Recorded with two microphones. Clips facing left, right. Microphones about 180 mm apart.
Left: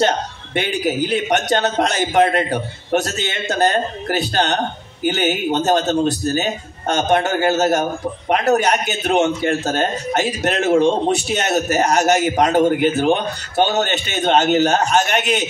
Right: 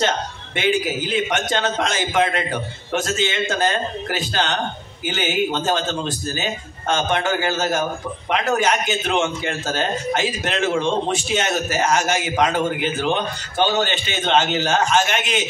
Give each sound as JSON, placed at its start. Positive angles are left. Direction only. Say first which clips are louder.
{"t": 0.6, "sound": "a man's voice", "louder": "left 1 dB", "side_deg": 40}